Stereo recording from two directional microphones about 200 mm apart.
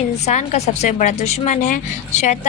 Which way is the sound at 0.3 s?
35° left (ahead or behind).